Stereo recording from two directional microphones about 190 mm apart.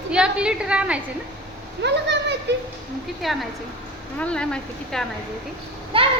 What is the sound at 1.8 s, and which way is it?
Speech, 65° right (ahead or behind).